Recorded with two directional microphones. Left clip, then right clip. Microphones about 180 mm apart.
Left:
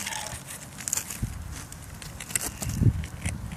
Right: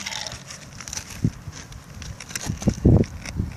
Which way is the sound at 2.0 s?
5° left (ahead or behind).